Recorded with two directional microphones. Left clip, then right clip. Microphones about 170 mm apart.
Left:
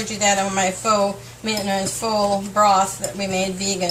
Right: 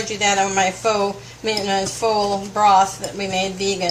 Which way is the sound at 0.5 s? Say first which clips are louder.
Right 1 dB; 25° right (ahead or behind).